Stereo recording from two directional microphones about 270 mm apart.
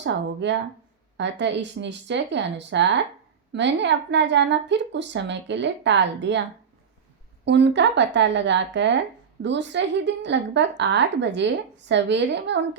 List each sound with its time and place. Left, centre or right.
0.0 s speech: right
7.4 s speech: right